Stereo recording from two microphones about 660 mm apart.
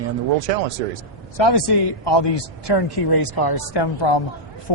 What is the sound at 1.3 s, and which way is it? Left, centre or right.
Speech, left.